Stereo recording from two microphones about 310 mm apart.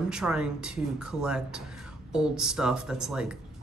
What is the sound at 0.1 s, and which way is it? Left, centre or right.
Speech, centre.